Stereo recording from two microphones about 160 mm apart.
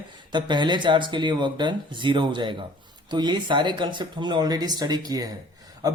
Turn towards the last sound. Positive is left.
turn(degrees=-20)  # may be behind; listen again after turning